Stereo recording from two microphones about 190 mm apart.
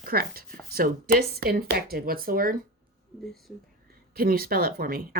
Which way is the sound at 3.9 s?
50° right (ahead or behind).